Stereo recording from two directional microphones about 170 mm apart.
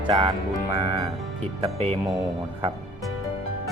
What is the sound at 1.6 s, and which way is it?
Speech, 35° right (ahead or behind).